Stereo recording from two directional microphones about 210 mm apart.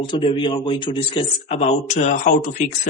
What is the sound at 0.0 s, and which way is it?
Speech, 20° left (ahead or behind).